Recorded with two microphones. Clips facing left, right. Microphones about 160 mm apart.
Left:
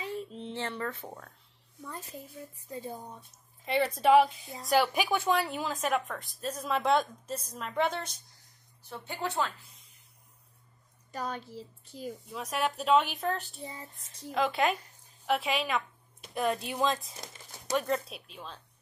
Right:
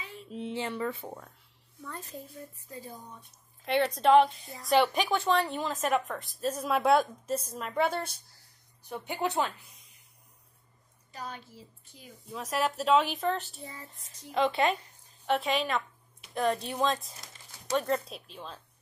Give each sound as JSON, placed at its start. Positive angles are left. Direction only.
{"t": 0.3, "sound": "speech", "side_deg": -10}
{"t": 2.7, "sound": "speech", "side_deg": 25}
{"t": 3.6, "sound": "a woman's voice", "side_deg": 5}
{"t": 11.1, "sound": "a woman's voice", "side_deg": 45}
{"t": 12.3, "sound": "a woman's voice", "side_deg": 0}